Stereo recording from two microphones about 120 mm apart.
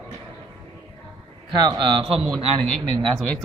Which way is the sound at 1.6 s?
40° right (ahead or behind).